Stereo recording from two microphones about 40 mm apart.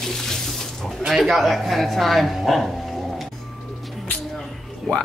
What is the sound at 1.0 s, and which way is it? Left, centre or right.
Speech, centre.